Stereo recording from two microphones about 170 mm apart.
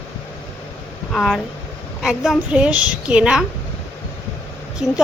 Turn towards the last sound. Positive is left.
turn(degrees=-5)  # may be behind; listen again after turning